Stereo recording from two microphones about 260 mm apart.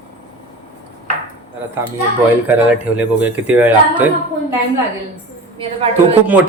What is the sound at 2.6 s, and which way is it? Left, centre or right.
A man's voice, centre.